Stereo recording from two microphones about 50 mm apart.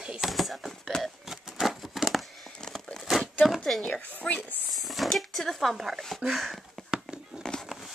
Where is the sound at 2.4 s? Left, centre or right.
Centre.